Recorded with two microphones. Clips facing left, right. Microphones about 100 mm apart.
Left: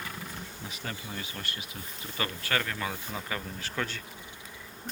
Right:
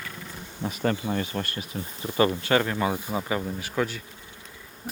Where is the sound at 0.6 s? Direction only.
50° right (ahead or behind).